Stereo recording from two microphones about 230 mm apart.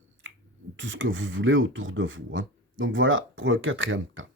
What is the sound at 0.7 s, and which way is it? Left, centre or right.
Speech, right.